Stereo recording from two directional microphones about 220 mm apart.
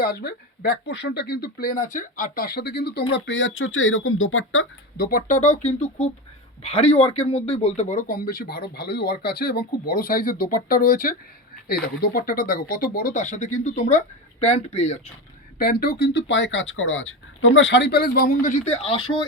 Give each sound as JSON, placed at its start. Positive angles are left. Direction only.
{"t": 0.0, "sound": "speech", "side_deg": 45}
{"t": 4.9, "sound": "speech", "side_deg": 40}
{"t": 15.5, "sound": "speech", "side_deg": 45}